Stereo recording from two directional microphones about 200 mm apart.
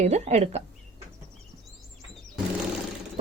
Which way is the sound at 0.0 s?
35° right (ahead or behind).